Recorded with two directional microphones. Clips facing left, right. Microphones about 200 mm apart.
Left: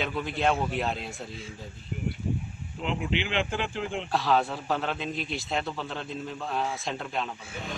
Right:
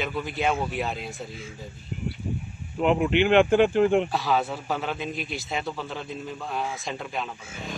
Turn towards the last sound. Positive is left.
turn(degrees=0)  # may be behind; listen again after turning